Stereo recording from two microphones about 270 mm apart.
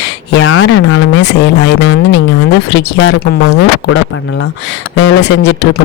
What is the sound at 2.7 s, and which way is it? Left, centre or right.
Speech, left.